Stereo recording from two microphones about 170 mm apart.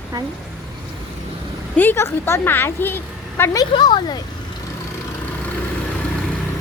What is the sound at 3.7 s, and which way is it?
Speech, 25° left (ahead or behind).